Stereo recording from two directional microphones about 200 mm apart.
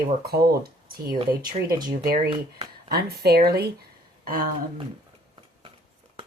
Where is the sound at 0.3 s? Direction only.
50° right (ahead or behind).